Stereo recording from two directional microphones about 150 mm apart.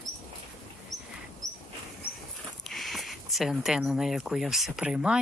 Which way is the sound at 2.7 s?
Centre (ahead or behind).